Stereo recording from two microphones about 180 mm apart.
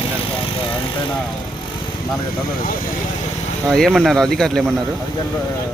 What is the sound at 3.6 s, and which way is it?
Speech, 5° left (ahead or behind).